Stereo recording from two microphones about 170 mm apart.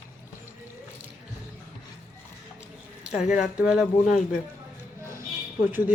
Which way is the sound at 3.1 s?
45° left (ahead or behind).